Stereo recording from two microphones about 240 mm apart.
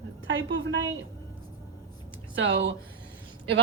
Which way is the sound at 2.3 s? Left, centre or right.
Right.